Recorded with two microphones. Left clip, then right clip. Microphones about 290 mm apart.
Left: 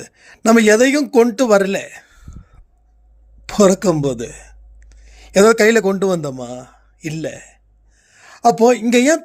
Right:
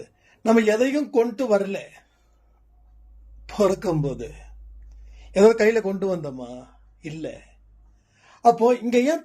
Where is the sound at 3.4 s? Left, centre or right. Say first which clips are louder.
Left 8 dB; left.